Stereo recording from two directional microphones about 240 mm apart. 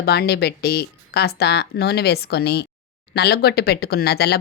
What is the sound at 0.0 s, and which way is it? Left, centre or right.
Speech, left.